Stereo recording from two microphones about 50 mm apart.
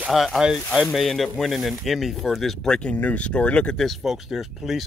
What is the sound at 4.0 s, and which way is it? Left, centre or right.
Speech, centre.